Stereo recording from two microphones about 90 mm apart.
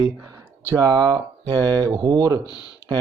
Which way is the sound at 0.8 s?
50° right (ahead or behind).